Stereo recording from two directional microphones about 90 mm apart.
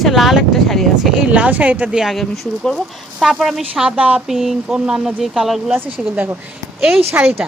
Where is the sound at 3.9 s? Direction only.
15° right (ahead or behind).